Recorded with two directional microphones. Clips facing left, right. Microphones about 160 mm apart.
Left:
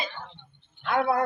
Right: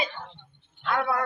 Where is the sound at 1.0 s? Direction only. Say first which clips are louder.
Left 4 dB; 25° left (ahead or behind).